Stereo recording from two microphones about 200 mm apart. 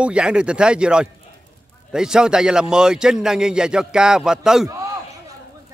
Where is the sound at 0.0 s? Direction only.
5° right (ahead or behind).